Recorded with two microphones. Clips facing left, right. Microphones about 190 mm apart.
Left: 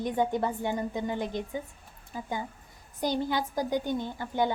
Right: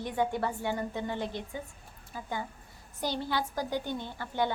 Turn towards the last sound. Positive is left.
turn(degrees=15)  # may be behind; listen again after turning